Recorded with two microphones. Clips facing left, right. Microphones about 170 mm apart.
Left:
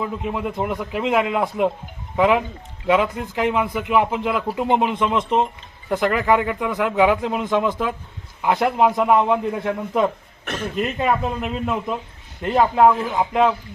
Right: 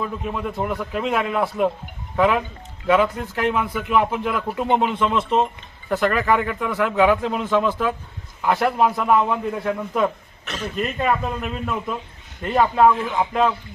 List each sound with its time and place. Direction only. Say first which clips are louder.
0.0 s a man's voice: left 1 dB; 15° left (ahead or behind)